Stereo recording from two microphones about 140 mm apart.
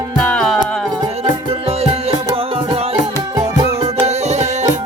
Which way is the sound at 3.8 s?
50° right (ahead or behind).